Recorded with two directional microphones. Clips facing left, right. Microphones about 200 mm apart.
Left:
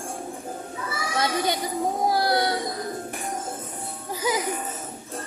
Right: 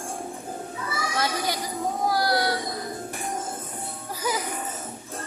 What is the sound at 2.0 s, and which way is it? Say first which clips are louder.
Music: left 1 dB; 25° left (ahead or behind).